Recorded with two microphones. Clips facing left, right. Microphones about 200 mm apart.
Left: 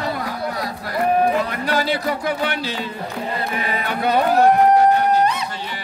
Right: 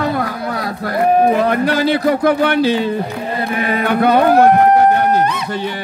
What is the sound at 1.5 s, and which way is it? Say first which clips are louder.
Speech: right 7 dB; 55° right (ahead or behind).